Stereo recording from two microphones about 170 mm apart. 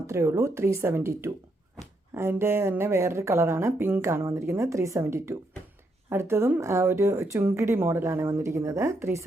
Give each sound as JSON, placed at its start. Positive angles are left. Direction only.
{"t": 0.1, "sound": "speech", "side_deg": -15}